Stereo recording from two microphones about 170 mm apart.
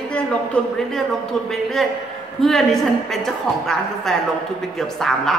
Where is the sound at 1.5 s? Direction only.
Centre (ahead or behind).